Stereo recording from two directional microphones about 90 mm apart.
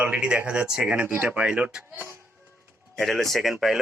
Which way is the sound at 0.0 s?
15° right (ahead or behind).